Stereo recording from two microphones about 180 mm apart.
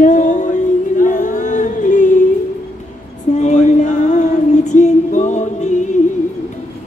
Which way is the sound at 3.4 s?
40° left (ahead or behind).